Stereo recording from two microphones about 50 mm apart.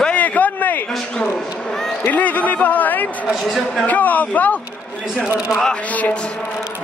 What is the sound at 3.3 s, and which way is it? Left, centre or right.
Speech, centre.